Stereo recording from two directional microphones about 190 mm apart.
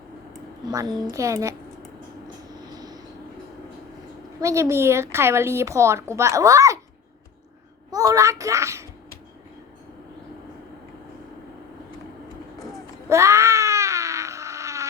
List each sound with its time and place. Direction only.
0.6 s a child's voice: 20° right (ahead or behind)
2.2 s vehicle: 20° right (ahead or behind)
4.4 s speech: 15° right (ahead or behind)
7.9 s speech: 20° right (ahead or behind)
13.1 s baby cry: 15° right (ahead or behind)